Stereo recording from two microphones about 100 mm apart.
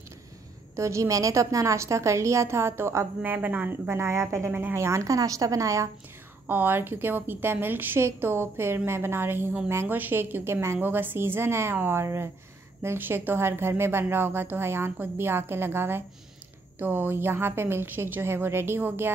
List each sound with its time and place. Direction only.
0.7 s a woman's voice: 30° right (ahead or behind)
6.4 s a woman's voice: 20° right (ahead or behind)